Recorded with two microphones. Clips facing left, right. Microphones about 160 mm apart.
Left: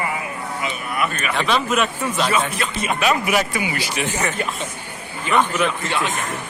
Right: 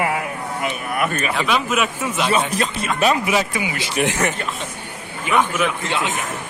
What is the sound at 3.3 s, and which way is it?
Speech, 25° right (ahead or behind).